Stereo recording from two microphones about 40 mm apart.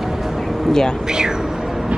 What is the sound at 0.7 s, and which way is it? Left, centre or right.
Speech, centre.